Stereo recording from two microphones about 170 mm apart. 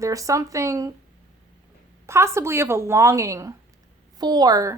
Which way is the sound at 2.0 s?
15° right (ahead or behind).